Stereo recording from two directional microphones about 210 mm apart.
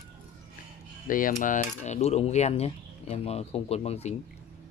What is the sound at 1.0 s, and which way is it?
Speech, 40° left (ahead or behind).